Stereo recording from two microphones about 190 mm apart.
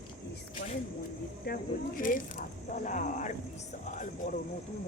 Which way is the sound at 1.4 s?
45° left (ahead or behind).